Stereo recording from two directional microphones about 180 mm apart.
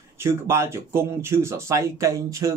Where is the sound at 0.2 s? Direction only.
15° right (ahead or behind).